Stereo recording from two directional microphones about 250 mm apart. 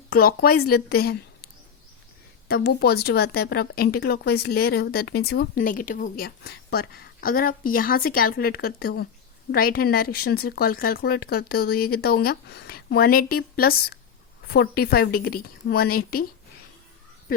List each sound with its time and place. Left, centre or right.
0.1 s speech: left
2.5 s speech: left